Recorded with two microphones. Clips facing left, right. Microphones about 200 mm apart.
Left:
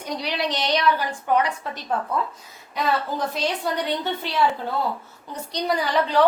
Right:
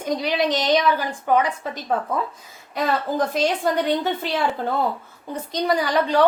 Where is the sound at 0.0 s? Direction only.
50° right (ahead or behind).